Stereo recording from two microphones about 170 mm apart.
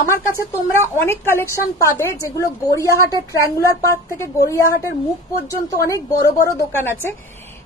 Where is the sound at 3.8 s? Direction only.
15° left (ahead or behind).